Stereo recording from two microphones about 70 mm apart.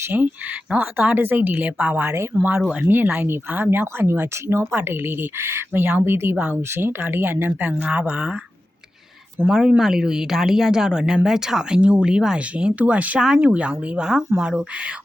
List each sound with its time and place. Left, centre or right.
0.0 s speech: right
2.8 s speech: right
9.5 s speech: centre
13.1 s speech: centre